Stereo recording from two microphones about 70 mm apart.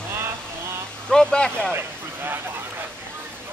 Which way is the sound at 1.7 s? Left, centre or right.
Right.